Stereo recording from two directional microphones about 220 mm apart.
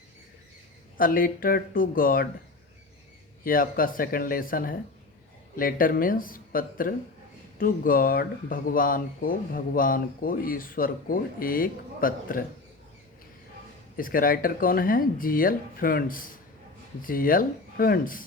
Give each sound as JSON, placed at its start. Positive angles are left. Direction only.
{"t": 0.9, "sound": "speech", "side_deg": 40}
{"t": 3.4, "sound": "speech", "side_deg": 40}
{"t": 13.9, "sound": "speech", "side_deg": 40}